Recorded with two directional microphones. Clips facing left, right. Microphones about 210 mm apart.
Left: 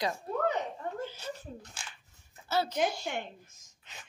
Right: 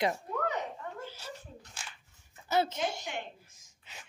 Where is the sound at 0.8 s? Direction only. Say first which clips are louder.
Left 5 dB; 35° left (ahead or behind).